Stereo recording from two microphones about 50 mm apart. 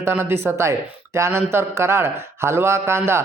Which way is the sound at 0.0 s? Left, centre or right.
Right.